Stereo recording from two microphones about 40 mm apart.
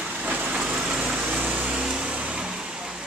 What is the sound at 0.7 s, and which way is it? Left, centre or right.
Vehicle, right.